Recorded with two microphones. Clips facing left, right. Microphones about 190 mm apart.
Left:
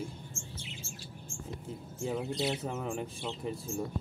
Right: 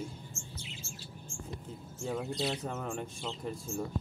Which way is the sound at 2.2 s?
20° left (ahead or behind).